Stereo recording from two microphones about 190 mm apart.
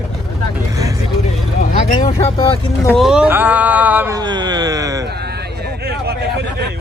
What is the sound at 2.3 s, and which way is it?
Speech, 20° left (ahead or behind).